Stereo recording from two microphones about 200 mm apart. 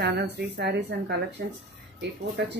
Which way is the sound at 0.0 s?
55° right (ahead or behind).